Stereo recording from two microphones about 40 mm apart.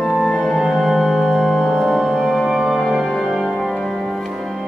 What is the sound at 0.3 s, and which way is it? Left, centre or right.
Music, centre.